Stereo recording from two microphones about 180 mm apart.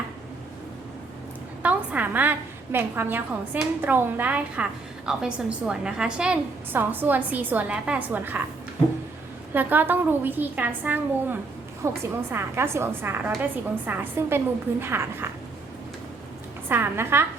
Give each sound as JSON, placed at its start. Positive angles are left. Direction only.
{"t": 1.6, "sound": "a sound", "side_deg": -10}
{"t": 2.7, "sound": "a woman's voice", "side_deg": -10}
{"t": 9.5, "sound": "a woman's voice", "side_deg": -10}
{"t": 16.6, "sound": "a woman's voice", "side_deg": -10}